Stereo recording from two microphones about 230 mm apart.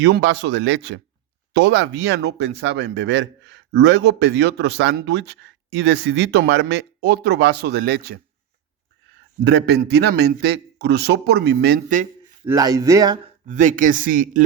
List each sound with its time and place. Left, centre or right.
0.0 s a man's voice: right
9.4 s a man's voice: right
12.5 s speech: centre
13.4 s speech: right